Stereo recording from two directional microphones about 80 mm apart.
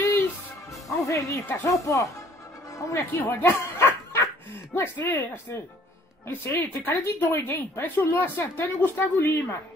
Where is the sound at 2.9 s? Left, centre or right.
Left.